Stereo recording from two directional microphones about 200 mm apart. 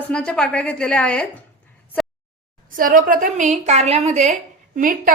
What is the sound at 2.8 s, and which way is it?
A woman's voice, 45° right (ahead or behind).